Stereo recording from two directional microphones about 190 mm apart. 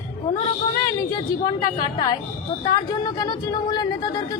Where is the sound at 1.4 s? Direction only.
25° left (ahead or behind).